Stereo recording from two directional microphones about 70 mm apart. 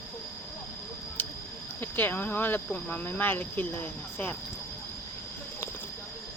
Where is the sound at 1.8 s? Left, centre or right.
Left.